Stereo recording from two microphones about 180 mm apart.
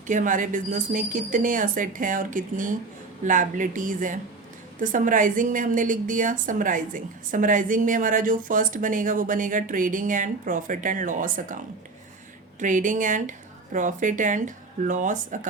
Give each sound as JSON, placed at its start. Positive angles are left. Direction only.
{"t": 0.1, "sound": "a woman's voice", "side_deg": -45}